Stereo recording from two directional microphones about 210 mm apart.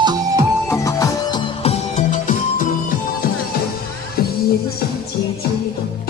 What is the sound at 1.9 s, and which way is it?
Music, 35° left (ahead or behind).